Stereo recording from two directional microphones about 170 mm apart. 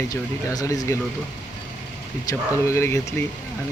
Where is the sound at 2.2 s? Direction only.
15° left (ahead or behind).